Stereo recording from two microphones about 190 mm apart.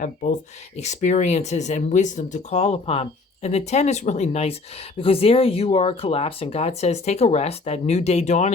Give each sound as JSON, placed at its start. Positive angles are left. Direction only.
{"t": 0.0, "sound": "speech", "side_deg": 40}